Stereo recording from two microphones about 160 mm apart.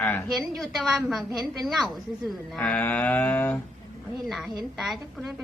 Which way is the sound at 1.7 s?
Centre (ahead or behind).